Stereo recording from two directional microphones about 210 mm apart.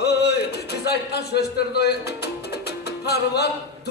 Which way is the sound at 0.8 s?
50° left (ahead or behind).